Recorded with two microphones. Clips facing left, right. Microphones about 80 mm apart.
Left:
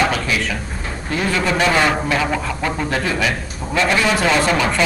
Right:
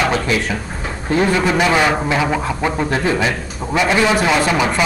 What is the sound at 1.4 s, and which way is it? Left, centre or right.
A man's voice, centre.